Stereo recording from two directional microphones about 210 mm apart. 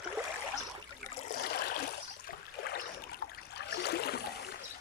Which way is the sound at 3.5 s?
50° left (ahead or behind).